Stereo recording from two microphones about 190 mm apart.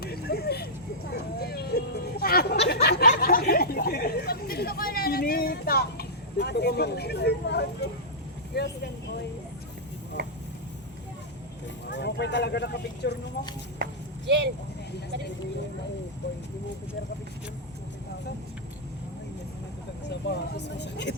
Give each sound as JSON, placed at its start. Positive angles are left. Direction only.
{"t": 0.0, "sound": "vehicle", "side_deg": 55}
{"t": 1.1, "sound": "a sound", "side_deg": 55}
{"t": 2.8, "sound": "chatter", "side_deg": 55}
{"t": 8.5, "sound": "speech", "side_deg": 60}
{"t": 10.2, "sound": "a sound", "side_deg": -55}
{"t": 11.9, "sound": "speech", "side_deg": 65}
{"t": 13.7, "sound": "clip-clop", "side_deg": -60}
{"t": 16.2, "sound": "a sound", "side_deg": 70}
{"t": 20.1, "sound": "speech", "side_deg": 65}